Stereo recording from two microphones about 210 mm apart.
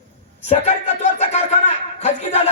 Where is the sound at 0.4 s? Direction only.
30° left (ahead or behind).